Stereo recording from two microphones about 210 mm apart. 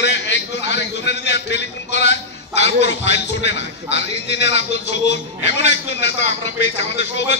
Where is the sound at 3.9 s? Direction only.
55° left (ahead or behind).